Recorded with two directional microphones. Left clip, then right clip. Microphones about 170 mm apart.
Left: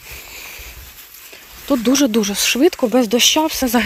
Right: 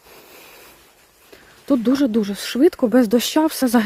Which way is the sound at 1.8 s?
10° right (ahead or behind).